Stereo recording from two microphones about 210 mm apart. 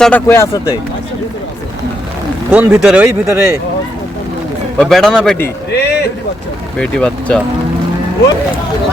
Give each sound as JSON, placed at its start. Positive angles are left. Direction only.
{"t": 0.0, "sound": "speech", "side_deg": 10}
{"t": 2.5, "sound": "speech", "side_deg": -5}
{"t": 4.8, "sound": "speech", "side_deg": 0}
{"t": 5.7, "sound": "a sound", "side_deg": 50}
{"t": 6.7, "sound": "speech", "side_deg": 5}